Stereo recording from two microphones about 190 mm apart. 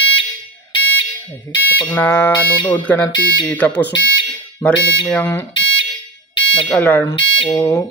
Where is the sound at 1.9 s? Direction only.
10° left (ahead or behind).